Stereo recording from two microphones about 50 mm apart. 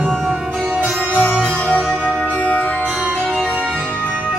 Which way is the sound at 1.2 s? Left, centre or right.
Left.